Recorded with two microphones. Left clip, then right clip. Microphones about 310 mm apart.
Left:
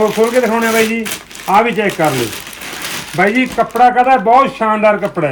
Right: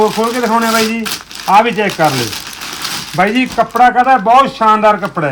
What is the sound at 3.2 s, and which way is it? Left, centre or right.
Speech, centre.